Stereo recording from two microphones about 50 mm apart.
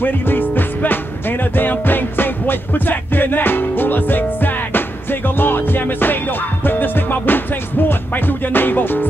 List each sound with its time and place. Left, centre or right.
0.0 s music: left